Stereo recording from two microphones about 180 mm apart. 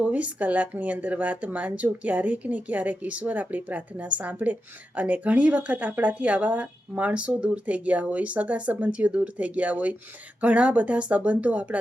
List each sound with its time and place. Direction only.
0.0 s speech: 10° right (ahead or behind)